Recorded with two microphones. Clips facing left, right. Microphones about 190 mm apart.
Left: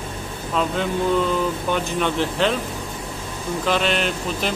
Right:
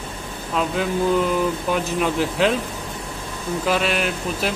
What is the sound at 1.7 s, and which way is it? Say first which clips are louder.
Speech: right 1 dB; 5° right (ahead or behind).